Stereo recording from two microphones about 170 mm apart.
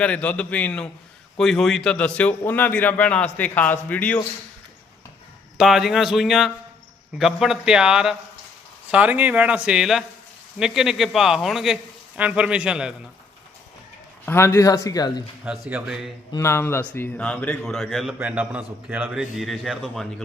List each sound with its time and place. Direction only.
0.0 s a man's voice: 5° left (ahead or behind)
5.5 s a man's voice: centre (ahead or behind)
14.3 s a man's voice: 15° left (ahead or behind)
15.7 s a man's voice: 5° right (ahead or behind)
16.3 s a man's voice: 15° left (ahead or behind); by 20.2 s centre (ahead or behind)